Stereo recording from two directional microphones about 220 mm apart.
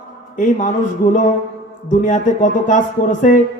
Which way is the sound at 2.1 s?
35° left (ahead or behind).